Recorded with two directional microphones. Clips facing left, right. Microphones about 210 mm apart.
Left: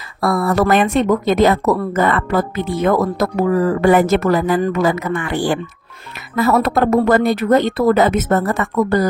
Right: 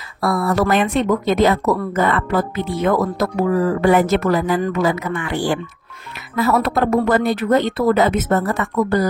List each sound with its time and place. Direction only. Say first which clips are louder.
0.2 s speech: left 2 dB; 50° left (ahead or behind)